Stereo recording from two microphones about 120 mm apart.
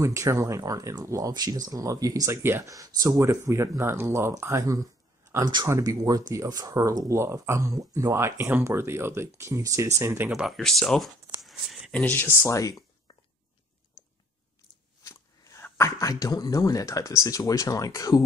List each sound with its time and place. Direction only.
0.0 s speech: 25° right (ahead or behind)
5.4 s speech: 35° right (ahead or behind)
5.7 s speech: 25° right (ahead or behind)
10.3 s speech: centre (ahead or behind)
12.0 s speech: 15° left (ahead or behind)
12.4 s speech: 25° left (ahead or behind)
15.0 s speech: 25° left (ahead or behind)